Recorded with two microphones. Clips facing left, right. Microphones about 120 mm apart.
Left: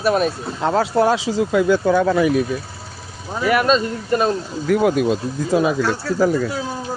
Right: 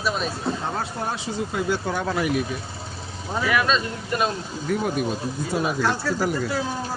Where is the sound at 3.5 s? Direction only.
35° left (ahead or behind).